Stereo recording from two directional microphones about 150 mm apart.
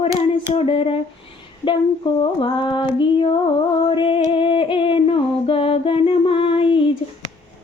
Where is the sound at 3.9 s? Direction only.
35° left (ahead or behind).